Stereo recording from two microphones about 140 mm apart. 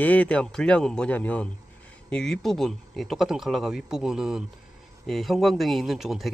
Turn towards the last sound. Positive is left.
turn(degrees=0)  # may be behind; listen again after turning